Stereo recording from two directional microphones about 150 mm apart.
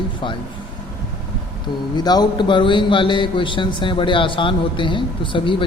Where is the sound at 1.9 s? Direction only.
25° left (ahead or behind).